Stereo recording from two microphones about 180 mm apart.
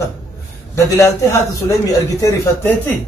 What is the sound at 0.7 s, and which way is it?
A man's voice, 15° left (ahead or behind).